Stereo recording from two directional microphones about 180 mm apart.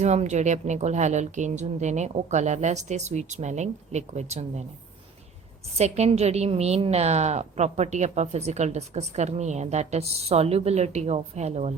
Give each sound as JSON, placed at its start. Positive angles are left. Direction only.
{"t": 0.0, "sound": "a woman's voice", "side_deg": -40}
{"t": 5.7, "sound": "a woman's voice", "side_deg": -35}